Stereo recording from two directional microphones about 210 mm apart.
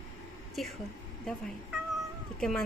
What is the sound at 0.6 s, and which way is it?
Speech, centre (ahead or behind).